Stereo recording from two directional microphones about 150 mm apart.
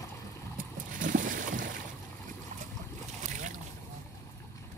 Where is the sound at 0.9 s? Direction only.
65° right (ahead or behind).